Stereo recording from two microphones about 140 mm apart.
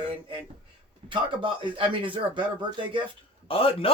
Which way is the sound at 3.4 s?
40° left (ahead or behind).